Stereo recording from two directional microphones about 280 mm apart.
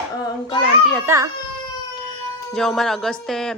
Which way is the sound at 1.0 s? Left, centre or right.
Centre.